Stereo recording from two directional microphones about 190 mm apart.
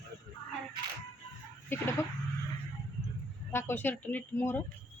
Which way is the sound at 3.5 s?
10° left (ahead or behind).